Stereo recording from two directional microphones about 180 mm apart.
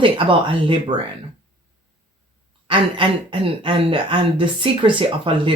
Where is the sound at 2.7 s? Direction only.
30° right (ahead or behind).